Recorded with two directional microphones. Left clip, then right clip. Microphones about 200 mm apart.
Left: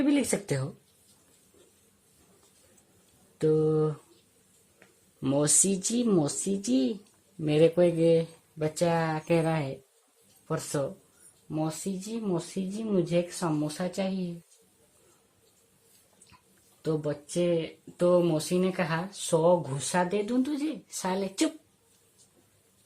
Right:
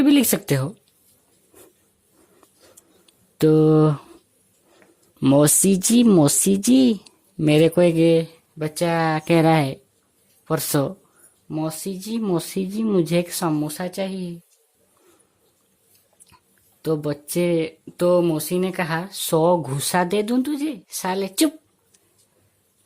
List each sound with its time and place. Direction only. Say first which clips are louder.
0.0 s speech: right 9 dB; 50° right (ahead or behind)
3.3 s speech: right 9 dB; 55° right (ahead or behind)
5.2 s speech: right 10 dB; 50° right (ahead or behind)
11.4 s speech: right 5 dB; 40° right (ahead or behind)
16.8 s speech: right 7 dB; 45° right (ahead or behind)
19.4 s speech: right 6 dB; 55° right (ahead or behind)